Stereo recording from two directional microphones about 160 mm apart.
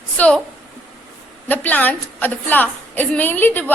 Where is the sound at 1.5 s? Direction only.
10° left (ahead or behind).